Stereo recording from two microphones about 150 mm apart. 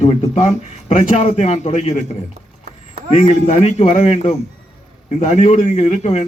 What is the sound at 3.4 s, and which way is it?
A man's voice, 45° left (ahead or behind).